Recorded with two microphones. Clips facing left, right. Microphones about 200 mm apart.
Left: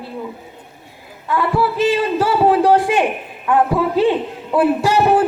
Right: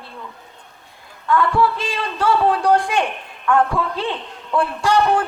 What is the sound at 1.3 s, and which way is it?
A woman's voice, 5° left (ahead or behind).